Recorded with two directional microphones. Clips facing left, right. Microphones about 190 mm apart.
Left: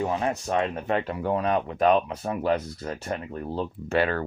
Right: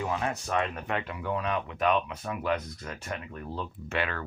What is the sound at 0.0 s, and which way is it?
Speech, 30° left (ahead or behind).